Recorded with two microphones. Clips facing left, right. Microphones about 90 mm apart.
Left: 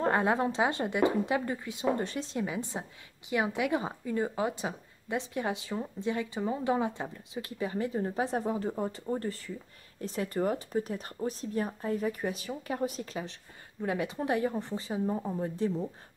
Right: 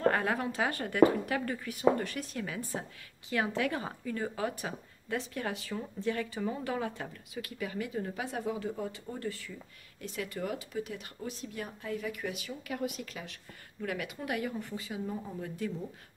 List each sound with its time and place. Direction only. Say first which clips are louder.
0.0 s speech: left 2 dB; 25° left (ahead or behind)